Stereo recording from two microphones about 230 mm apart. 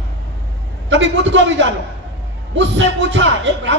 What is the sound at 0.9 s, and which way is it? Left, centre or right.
A man's voice, right.